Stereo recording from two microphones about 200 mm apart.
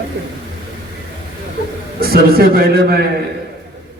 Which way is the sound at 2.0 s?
50° right (ahead or behind).